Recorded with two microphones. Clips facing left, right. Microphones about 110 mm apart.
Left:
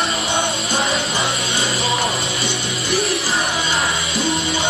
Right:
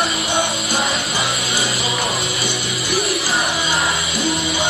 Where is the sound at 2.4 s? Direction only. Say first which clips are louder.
Even; 25° left (ahead or behind).